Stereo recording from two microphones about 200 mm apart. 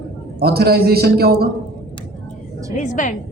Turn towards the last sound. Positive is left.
turn(degrees=40)  # may be behind; listen again after turning